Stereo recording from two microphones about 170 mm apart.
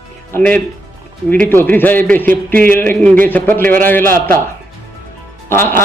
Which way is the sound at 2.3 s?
55° right (ahead or behind).